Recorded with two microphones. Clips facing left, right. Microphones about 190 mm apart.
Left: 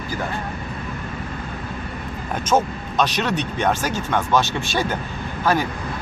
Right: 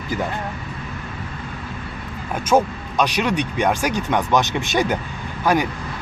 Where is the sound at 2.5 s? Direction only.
10° right (ahead or behind).